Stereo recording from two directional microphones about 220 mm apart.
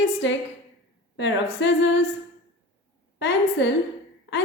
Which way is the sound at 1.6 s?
55° left (ahead or behind).